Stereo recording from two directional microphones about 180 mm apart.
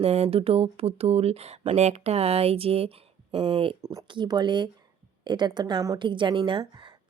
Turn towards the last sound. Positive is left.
turn(degrees=-30)  # may be behind; listen again after turning